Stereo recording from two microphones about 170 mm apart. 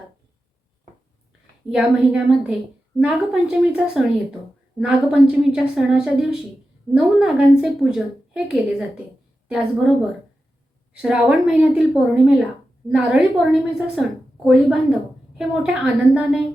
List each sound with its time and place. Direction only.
1.7 s a woman's voice: 5° right (ahead or behind)
11.0 s a woman's voice: 5° right (ahead or behind)